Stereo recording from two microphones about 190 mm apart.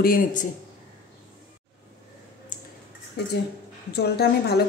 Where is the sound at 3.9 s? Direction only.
55° left (ahead or behind).